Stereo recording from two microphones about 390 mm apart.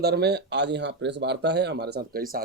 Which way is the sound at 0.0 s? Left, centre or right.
Right.